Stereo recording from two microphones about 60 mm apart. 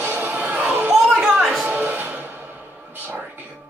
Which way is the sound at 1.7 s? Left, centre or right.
Right.